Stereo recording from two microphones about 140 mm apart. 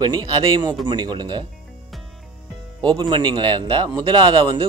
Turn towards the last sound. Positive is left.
turn(degrees=-35)  # may be behind; listen again after turning